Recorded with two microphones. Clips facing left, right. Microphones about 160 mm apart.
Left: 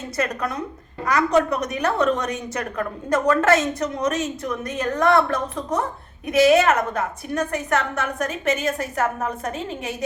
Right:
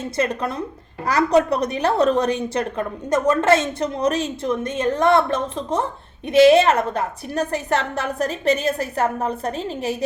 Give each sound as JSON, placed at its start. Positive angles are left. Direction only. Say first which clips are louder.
{"t": 0.2, "sound": "a woman's voice", "louder": "right 2 dB", "side_deg": -25}